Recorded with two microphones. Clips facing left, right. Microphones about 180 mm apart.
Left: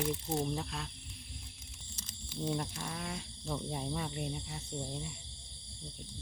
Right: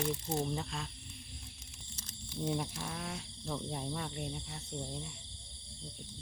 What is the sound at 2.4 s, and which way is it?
Speech, 5° right (ahead or behind).